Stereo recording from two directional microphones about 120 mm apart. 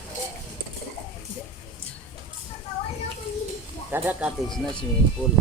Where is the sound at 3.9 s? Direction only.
15° right (ahead or behind).